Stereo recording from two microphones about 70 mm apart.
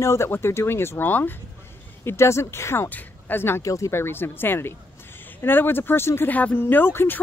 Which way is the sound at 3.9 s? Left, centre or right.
Left.